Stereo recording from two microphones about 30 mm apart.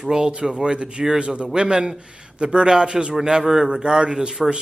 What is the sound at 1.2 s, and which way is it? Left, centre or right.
Speech, right.